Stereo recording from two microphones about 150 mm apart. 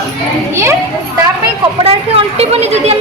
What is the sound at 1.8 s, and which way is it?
A woman's voice, 35° right (ahead or behind).